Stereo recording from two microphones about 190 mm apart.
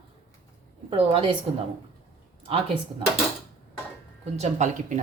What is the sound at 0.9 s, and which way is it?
Speech, 30° right (ahead or behind).